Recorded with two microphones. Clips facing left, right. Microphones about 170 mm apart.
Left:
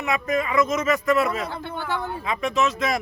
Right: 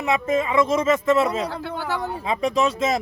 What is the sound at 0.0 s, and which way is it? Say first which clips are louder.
A man's voice: right 3 dB; 25° right (ahead or behind).